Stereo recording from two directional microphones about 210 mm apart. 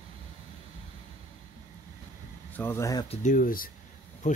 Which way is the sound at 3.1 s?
40° left (ahead or behind).